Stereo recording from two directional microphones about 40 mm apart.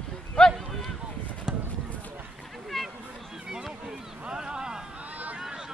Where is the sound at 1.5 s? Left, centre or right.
Centre.